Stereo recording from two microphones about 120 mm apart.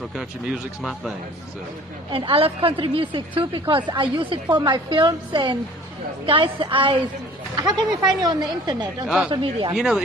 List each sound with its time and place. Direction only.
0.1 s speech: centre (ahead or behind)
2.0 s a woman's voice: 50° right (ahead or behind)
9.0 s speech: 5° right (ahead or behind)
9.3 s speech: 40° right (ahead or behind)
9.8 s speech: 5° right (ahead or behind)